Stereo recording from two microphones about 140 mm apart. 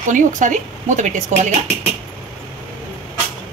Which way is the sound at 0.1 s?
65° right (ahead or behind).